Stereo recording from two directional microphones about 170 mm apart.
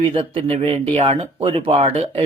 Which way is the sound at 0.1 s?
30° right (ahead or behind).